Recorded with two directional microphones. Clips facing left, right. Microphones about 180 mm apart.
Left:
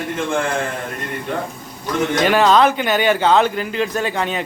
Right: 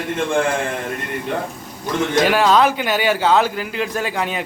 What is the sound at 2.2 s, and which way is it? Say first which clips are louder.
A man's voice: left 2 dB; 5° right (ahead or behind).